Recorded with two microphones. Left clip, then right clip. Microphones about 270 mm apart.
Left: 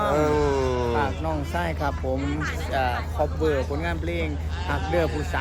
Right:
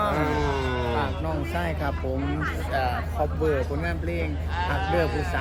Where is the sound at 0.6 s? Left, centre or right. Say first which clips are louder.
Left 3 dB; centre.